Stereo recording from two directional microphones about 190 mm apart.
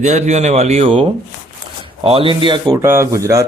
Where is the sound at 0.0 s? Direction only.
35° right (ahead or behind).